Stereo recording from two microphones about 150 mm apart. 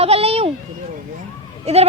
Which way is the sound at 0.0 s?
40° right (ahead or behind).